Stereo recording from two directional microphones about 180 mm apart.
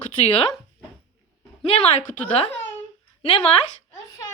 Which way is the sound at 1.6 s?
35° left (ahead or behind).